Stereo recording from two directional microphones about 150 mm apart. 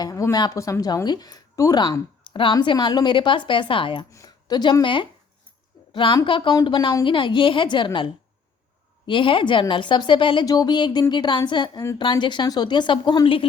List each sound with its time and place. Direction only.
0.0 s a woman's voice: 20° left (ahead or behind)
4.1 s a woman's voice: 25° left (ahead or behind)